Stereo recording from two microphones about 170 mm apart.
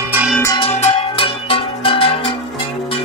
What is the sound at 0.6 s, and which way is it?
Music, 35° left (ahead or behind).